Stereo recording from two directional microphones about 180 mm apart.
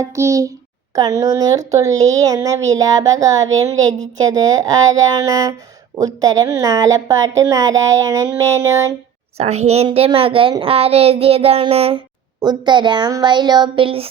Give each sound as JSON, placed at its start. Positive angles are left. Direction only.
{"t": 0.0, "sound": "a child's voice", "side_deg": -15}
{"t": 9.4, "sound": "speech", "side_deg": -35}